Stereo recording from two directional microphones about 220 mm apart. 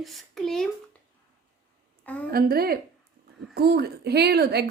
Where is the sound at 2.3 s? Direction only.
45° right (ahead or behind).